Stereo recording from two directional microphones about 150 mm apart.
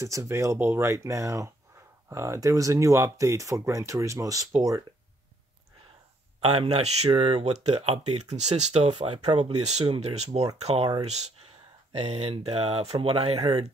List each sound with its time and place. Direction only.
0.0 s speech: 20° right (ahead or behind)
6.6 s speech: 45° right (ahead or behind)